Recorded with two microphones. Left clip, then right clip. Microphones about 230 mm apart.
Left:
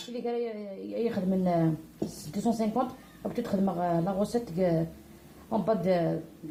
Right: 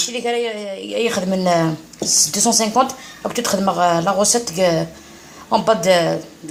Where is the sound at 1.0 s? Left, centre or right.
Centre.